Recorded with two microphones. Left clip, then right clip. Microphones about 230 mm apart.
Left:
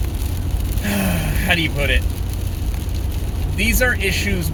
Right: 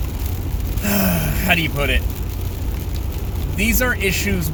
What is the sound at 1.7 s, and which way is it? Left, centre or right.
Speech, centre.